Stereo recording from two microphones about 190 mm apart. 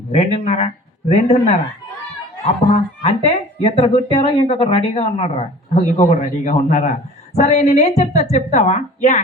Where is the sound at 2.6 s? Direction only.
30° left (ahead or behind).